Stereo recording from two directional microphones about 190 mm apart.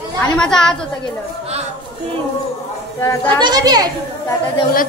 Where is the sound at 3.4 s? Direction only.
20° right (ahead or behind).